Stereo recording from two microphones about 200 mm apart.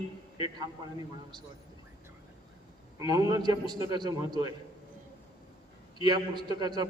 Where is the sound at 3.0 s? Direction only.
20° right (ahead or behind).